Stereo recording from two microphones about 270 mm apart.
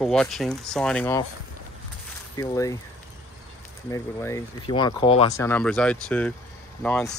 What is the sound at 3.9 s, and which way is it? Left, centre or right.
Speech, centre.